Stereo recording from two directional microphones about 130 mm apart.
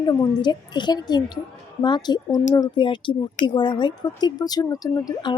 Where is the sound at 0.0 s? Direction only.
35° left (ahead or behind).